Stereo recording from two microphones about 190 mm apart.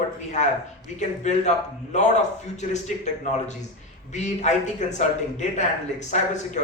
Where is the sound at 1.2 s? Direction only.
35° left (ahead or behind).